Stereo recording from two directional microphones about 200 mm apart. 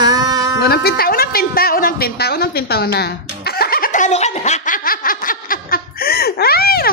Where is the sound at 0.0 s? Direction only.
20° right (ahead or behind).